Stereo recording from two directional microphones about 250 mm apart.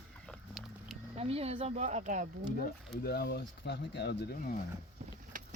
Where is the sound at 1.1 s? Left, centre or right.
Right.